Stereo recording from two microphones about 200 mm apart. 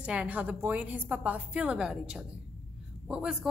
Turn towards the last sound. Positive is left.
turn(degrees=-5)  # may be behind; listen again after turning